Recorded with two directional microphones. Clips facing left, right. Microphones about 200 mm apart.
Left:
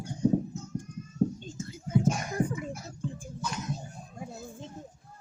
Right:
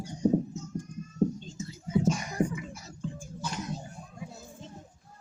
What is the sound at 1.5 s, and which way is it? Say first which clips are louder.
Whispering: even; 55° left (ahead or behind).